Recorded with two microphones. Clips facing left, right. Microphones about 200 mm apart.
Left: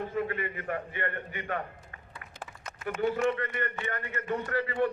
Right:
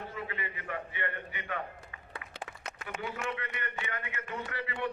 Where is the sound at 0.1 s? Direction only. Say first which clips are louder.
Left 8 dB; 50° left (ahead or behind).